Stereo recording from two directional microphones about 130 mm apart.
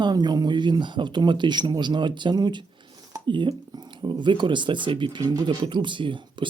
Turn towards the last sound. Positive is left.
turn(degrees=-40)  # may be behind; listen again after turning